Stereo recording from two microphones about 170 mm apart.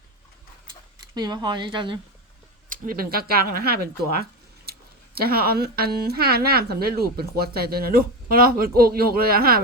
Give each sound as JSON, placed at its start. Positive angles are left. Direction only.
{"t": 1.1, "sound": "speech", "side_deg": -25}
{"t": 2.6, "sound": "speech", "side_deg": -55}